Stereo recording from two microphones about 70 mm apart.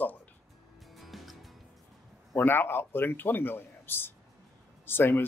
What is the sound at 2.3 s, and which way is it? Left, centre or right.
A man's voice, left.